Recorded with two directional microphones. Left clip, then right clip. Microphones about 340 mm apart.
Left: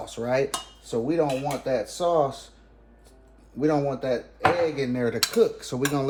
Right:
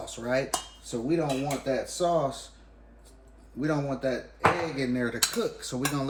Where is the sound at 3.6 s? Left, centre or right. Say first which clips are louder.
Left 5 dB; centre.